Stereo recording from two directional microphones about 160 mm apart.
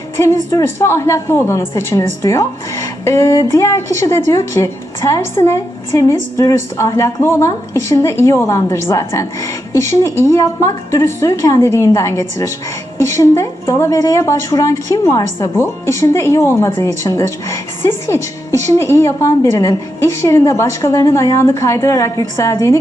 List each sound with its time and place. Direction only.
0.2 s a woman's voice: 15° left (ahead or behind)